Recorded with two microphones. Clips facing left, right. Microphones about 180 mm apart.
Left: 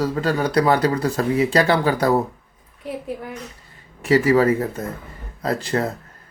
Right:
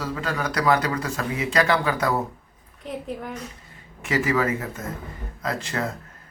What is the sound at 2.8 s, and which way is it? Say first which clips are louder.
Speech: left 3 dB; 10° left (ahead or behind).